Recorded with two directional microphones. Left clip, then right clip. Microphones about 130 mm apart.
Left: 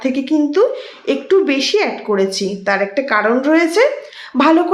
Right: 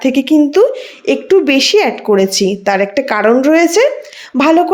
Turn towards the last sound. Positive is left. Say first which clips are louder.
# right 2 dB
turn(degrees=-40)  # may be behind; listen again after turning